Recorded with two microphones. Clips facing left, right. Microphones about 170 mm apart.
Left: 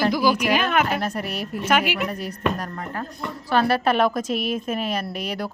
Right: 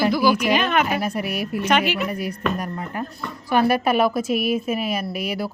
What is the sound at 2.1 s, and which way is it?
Speech, 10° right (ahead or behind).